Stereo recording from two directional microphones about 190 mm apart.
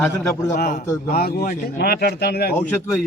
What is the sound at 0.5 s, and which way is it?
A man's voice, 50° left (ahead or behind).